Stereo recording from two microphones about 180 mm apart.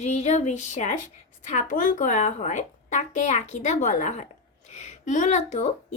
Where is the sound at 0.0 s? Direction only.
40° left (ahead or behind).